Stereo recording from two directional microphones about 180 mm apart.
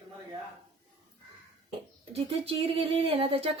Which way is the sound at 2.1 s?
30° right (ahead or behind).